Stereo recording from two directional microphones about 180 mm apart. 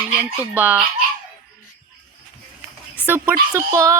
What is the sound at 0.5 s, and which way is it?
Female singing, 10° right (ahead or behind).